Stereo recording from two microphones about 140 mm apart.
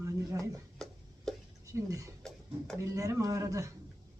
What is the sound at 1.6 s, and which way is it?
Speech, 25° right (ahead or behind).